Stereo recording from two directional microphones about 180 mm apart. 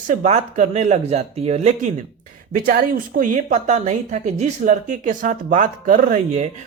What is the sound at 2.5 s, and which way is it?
Speech, 55° right (ahead or behind).